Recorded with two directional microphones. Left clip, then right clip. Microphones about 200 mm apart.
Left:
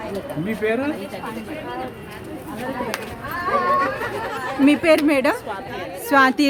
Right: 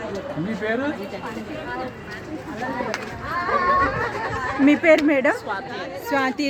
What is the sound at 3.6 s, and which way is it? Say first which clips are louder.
Speech: even; 55° left (ahead or behind).